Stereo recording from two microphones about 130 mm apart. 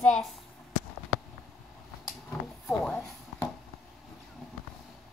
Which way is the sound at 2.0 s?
5° left (ahead or behind).